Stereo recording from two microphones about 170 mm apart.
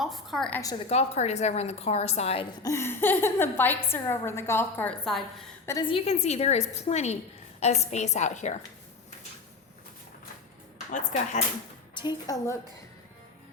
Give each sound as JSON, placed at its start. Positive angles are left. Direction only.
{"t": 0.0, "sound": "a woman's voice", "side_deg": 0}
{"t": 0.9, "sound": "a woman's voice", "side_deg": 40}
{"t": 2.6, "sound": "a woman's voice", "side_deg": 15}
{"t": 5.9, "sound": "a woman's voice", "side_deg": 40}
{"t": 10.9, "sound": "a woman's voice", "side_deg": 40}
{"t": 11.9, "sound": "a woman's voice", "side_deg": 25}